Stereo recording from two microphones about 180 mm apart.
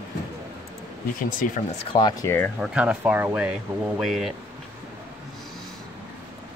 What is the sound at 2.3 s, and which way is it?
Speech, 10° left (ahead or behind).